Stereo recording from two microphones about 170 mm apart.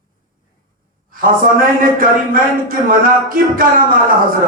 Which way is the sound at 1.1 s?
55° right (ahead or behind).